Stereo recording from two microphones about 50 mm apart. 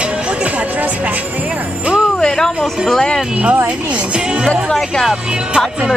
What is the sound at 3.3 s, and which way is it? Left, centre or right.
Speech, right.